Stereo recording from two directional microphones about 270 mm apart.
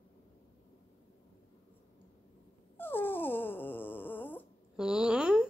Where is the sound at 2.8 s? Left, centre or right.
Centre.